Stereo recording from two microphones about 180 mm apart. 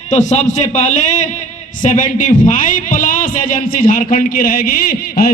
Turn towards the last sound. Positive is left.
turn(degrees=55)  # may be behind; listen again after turning